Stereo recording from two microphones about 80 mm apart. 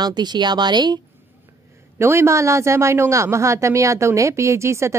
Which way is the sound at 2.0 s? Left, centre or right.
Right.